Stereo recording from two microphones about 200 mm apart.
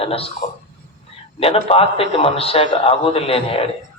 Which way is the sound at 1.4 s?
30° left (ahead or behind).